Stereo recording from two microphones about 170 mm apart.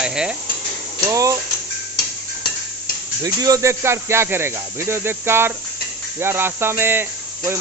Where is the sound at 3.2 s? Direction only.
20° right (ahead or behind).